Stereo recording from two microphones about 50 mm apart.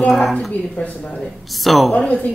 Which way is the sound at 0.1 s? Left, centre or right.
Centre.